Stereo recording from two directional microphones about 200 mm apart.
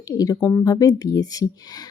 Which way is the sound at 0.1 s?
20° left (ahead or behind).